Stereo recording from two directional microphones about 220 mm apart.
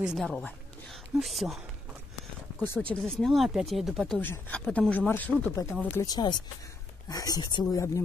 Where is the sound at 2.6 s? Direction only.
10° left (ahead or behind).